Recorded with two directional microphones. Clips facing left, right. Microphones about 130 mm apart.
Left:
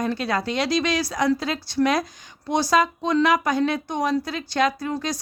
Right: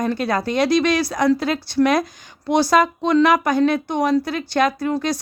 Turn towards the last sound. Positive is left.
turn(degrees=-60)  # may be behind; listen again after turning